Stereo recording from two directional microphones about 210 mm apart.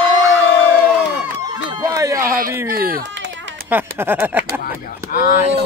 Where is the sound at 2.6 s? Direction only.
45° right (ahead or behind).